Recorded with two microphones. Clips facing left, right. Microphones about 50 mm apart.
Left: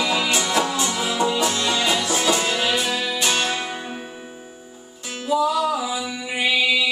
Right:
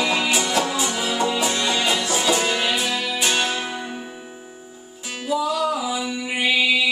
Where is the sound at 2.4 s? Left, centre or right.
Centre.